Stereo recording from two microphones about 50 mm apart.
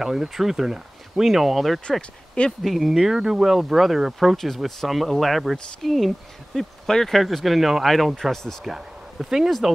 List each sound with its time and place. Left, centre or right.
0.0 s speech: centre
1.9 s speech: left
2.6 s speech: centre
8.6 s speech: centre